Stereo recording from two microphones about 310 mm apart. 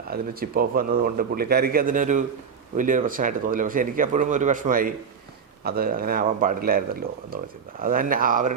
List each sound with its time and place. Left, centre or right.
0.1 s speech: right